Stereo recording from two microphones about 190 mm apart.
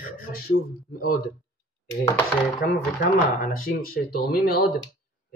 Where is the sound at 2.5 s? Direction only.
45° left (ahead or behind).